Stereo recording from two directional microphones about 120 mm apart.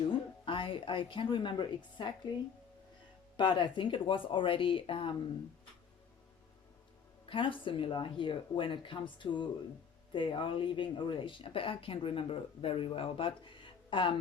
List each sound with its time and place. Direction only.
0.4 s a woman's voice: 45° left (ahead or behind)
3.3 s speech: 45° left (ahead or behind)
7.3 s speech: 45° left (ahead or behind)